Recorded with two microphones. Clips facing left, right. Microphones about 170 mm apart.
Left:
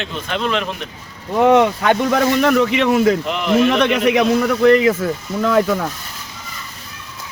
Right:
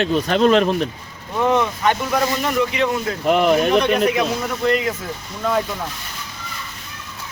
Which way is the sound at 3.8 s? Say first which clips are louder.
Left 3 dB; 80° left.